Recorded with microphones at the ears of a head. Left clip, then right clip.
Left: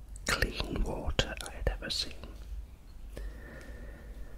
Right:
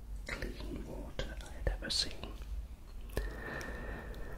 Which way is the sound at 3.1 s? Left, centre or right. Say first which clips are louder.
Right 7 dB; right.